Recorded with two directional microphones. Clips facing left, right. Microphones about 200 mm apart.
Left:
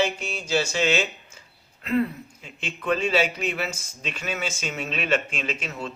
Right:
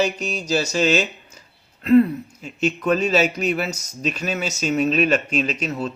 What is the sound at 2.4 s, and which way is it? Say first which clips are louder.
Speech: right 6 dB; 40° right (ahead or behind).